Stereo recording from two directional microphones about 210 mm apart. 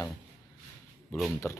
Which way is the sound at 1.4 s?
10° left (ahead or behind).